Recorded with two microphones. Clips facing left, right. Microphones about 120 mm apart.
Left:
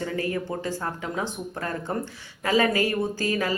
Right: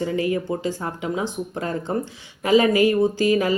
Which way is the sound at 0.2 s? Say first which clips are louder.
Right 5 dB; 15° right (ahead or behind).